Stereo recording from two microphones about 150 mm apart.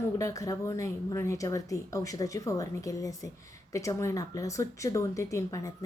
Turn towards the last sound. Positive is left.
turn(degrees=20)  # may be behind; listen again after turning